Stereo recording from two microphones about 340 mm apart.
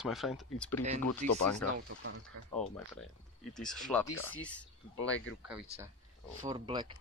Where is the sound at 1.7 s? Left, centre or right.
Right.